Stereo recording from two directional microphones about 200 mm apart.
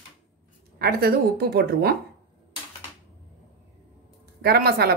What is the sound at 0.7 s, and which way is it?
Speech, 50° right (ahead or behind).